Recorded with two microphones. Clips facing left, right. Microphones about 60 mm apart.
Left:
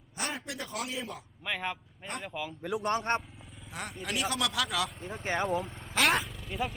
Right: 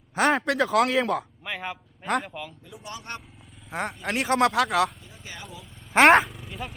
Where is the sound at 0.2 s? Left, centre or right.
Right.